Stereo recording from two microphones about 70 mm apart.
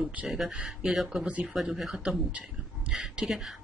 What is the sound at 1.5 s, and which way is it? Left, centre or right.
Speech, centre.